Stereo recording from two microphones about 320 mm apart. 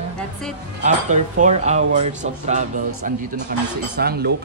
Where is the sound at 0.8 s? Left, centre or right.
Right.